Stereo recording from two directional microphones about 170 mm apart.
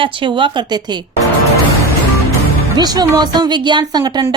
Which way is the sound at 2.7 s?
25° right (ahead or behind).